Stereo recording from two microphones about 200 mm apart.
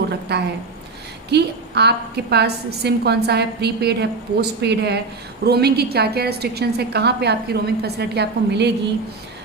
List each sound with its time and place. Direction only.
0.3 s a woman's voice: 55° right (ahead or behind)